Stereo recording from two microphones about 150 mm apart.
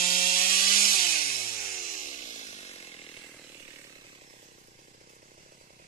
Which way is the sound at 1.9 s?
55° left (ahead or behind).